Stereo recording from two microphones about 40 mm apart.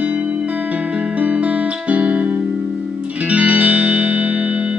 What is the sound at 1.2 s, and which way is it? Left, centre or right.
Music, right.